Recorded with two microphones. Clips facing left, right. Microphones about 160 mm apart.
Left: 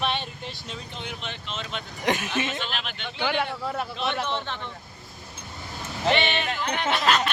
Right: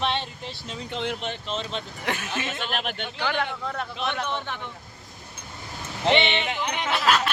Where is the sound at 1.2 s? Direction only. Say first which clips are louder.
Right 5 dB; 45° right (ahead or behind).